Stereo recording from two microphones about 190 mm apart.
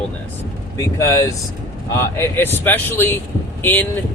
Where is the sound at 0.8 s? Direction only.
15° left (ahead or behind).